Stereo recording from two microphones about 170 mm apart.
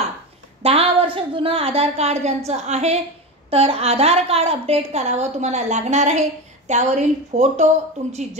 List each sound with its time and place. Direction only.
0.6 s a woman's voice: 35° right (ahead or behind)